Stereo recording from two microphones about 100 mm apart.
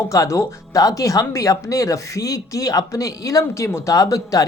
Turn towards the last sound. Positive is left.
turn(degrees=35)  # may be behind; listen again after turning